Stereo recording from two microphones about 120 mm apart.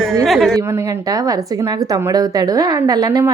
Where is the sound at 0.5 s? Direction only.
30° right (ahead or behind).